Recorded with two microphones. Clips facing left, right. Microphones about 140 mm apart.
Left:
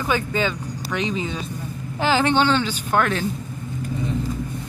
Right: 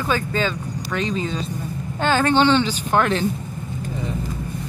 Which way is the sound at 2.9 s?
15° right (ahead or behind).